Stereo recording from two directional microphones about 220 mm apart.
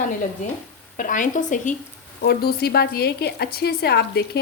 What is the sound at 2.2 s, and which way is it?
A woman's voice, 45° left (ahead or behind).